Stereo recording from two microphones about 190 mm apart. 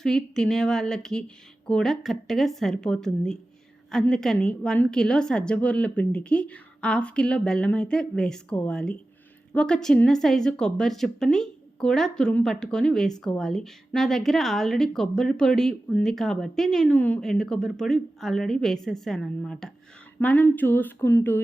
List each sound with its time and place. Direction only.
0.0 s speech: 5° left (ahead or behind)